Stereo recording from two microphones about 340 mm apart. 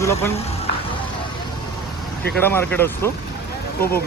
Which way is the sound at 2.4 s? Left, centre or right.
Centre.